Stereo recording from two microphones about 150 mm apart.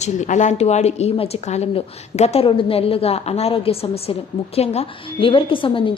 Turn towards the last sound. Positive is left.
turn(degrees=35)  # may be behind; listen again after turning